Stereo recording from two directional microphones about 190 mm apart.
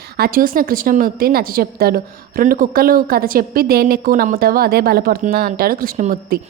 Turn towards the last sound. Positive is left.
turn(degrees=-45)  # may be behind; listen again after turning